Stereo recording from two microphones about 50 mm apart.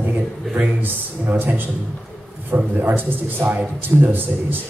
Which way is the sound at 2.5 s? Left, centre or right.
Right.